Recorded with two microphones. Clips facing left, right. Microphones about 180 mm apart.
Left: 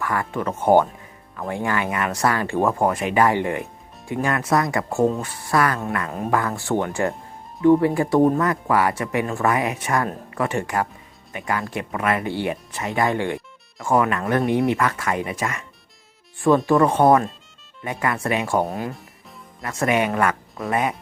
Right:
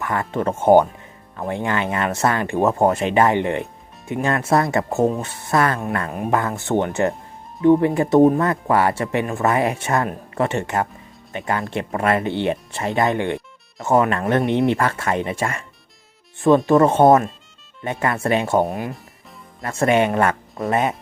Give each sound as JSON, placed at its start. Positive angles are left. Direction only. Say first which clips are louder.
{"t": 0.0, "sound": "speech", "louder": "right 2 dB", "side_deg": -25}
{"t": 16.6, "sound": "speech", "louder": "right 3 dB", "side_deg": -25}